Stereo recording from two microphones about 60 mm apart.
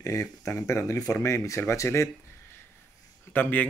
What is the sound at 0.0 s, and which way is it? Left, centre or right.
Speech, left.